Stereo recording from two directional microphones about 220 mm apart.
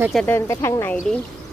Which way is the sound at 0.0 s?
Centre (ahead or behind).